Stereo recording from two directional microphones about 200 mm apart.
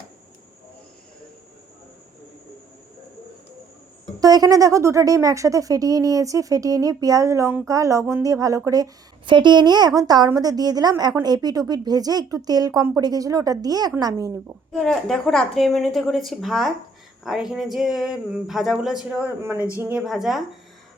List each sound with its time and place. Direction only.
4.2 s a woman's voice: 20° right (ahead or behind)
14.7 s speech: centre (ahead or behind)
20.0 s speech: centre (ahead or behind)